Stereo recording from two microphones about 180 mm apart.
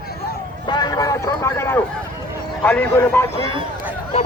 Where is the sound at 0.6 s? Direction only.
25° left (ahead or behind).